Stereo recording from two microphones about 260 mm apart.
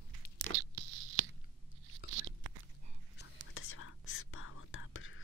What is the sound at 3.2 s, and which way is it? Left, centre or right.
Whispering, left.